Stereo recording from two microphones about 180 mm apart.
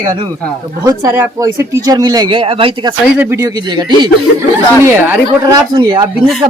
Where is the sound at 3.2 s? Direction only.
15° right (ahead or behind).